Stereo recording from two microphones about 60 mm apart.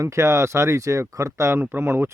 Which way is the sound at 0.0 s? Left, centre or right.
Right.